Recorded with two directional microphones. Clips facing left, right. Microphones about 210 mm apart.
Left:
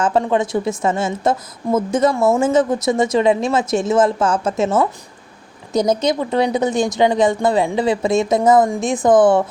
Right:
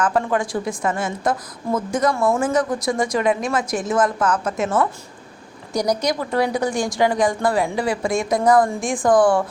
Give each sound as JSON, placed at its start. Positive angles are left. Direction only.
{"t": 0.0, "sound": "a woman's voice", "side_deg": 25}